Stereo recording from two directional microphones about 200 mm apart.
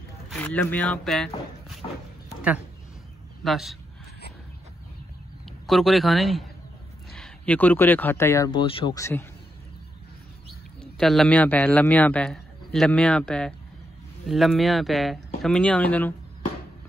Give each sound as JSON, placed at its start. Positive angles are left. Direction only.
{"t": 0.3, "sound": "speech", "side_deg": 5}
{"t": 3.4, "sound": "speech", "side_deg": 0}
{"t": 5.7, "sound": "speech", "side_deg": 0}
{"t": 8.5, "sound": "speech", "side_deg": 25}
{"t": 10.8, "sound": "a man's voice", "side_deg": 0}